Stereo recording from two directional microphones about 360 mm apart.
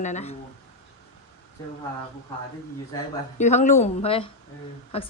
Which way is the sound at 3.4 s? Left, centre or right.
Centre.